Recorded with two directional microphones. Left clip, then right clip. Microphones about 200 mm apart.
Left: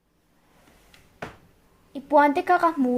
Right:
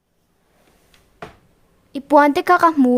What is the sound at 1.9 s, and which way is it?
A woman's voice, 35° right (ahead or behind).